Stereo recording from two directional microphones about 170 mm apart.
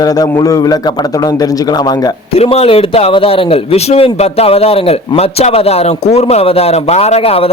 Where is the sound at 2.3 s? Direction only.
35° left (ahead or behind).